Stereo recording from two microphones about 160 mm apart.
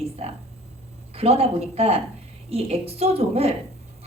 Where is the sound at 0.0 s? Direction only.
40° right (ahead or behind).